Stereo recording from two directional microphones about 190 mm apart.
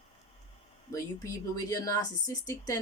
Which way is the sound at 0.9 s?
15° left (ahead or behind).